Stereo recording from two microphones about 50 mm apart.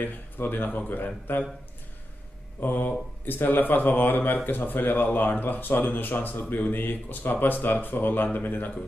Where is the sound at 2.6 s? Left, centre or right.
Left.